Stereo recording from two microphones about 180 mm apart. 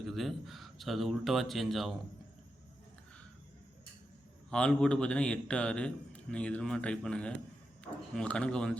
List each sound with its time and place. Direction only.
0.0 s a man's voice: centre (ahead or behind)
4.5 s a man's voice: 5° left (ahead or behind)